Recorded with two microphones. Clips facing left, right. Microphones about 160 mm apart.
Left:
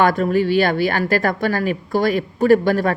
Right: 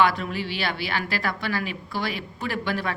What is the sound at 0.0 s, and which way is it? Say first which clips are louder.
A woman's voice: left 7 dB; 45° left (ahead or behind).